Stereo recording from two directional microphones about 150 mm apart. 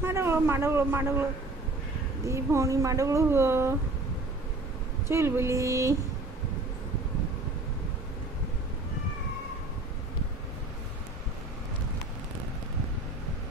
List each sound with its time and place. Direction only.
0.0 s a man's voice: 15° right (ahead or behind)
2.2 s speech: 20° right (ahead or behind)
5.0 s speech: 15° right (ahead or behind)